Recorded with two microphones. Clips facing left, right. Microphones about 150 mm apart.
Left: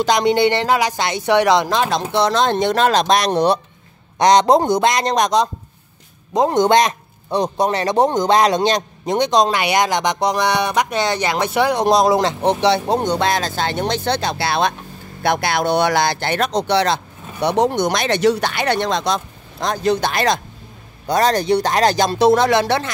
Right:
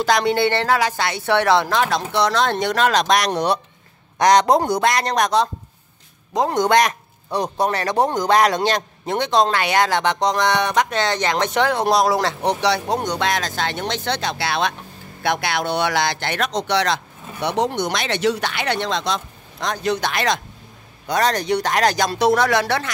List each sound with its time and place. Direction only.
0.0 s speech: 20° left (ahead or behind)
17.5 s speech: 45° left (ahead or behind); by 22.8 s 25° left (ahead or behind)